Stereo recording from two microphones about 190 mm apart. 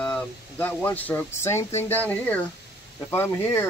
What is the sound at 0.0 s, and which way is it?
Speech, 10° left (ahead or behind).